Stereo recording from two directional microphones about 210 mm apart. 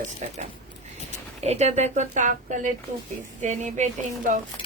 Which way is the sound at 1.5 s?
30° right (ahead or behind).